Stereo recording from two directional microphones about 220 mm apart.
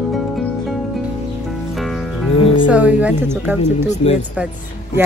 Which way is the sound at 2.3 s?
25° left (ahead or behind).